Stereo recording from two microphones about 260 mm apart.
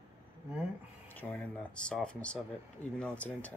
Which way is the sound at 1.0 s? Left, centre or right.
Centre.